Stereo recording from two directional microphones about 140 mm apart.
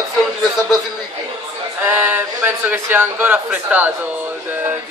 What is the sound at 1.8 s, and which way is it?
A man's voice, 10° right (ahead or behind).